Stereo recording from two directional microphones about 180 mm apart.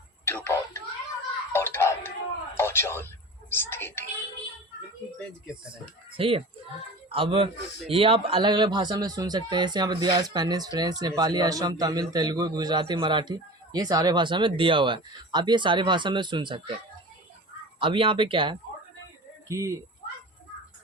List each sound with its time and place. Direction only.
0.3 s a sound: 15° left (ahead or behind)
2.6 s speech: 15° left (ahead or behind)
6.1 s speech: 30° right (ahead or behind)
17.7 s speech: 30° right (ahead or behind)
19.5 s speech: 15° right (ahead or behind)